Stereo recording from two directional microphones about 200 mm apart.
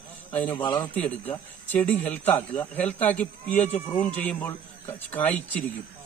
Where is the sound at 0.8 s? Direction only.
5° left (ahead or behind).